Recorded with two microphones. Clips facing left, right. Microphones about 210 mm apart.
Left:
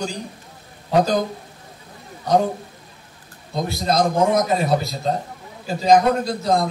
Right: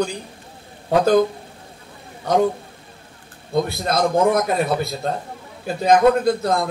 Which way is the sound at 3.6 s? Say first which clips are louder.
Left 1 dB; 55° right (ahead or behind).